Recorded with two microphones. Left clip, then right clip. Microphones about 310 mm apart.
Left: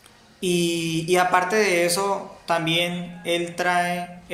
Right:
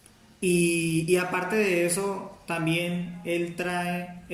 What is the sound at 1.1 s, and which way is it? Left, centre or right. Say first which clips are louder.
Mantra: left 9 dB; centre.